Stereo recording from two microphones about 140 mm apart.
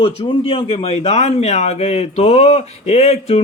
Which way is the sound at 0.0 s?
40° left (ahead or behind).